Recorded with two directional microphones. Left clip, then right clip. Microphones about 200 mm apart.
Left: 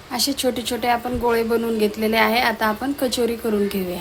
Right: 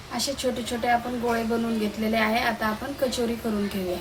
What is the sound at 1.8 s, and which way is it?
A woman's voice, 55° left (ahead or behind).